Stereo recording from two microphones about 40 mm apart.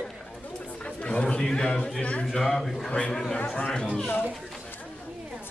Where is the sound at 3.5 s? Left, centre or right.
Left.